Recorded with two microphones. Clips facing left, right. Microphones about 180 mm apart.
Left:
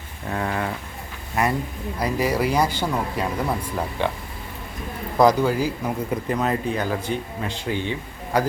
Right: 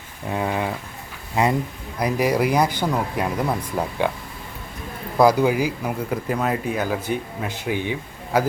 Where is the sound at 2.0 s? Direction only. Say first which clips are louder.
Right 2 dB; 15° right (ahead or behind).